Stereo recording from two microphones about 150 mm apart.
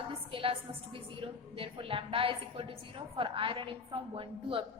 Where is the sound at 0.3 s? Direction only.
35° right (ahead or behind).